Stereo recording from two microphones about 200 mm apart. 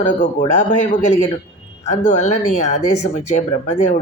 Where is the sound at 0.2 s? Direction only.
40° left (ahead or behind).